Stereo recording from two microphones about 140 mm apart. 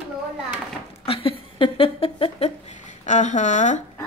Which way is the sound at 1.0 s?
40° left (ahead or behind).